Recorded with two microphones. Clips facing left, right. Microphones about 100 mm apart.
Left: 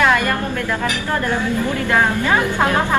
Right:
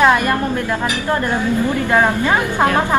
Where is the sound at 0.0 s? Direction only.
25° right (ahead or behind).